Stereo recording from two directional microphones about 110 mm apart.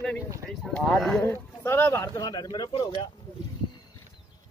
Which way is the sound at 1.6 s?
20° left (ahead or behind).